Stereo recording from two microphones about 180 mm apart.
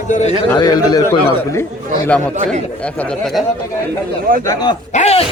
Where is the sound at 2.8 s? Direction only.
5° left (ahead or behind).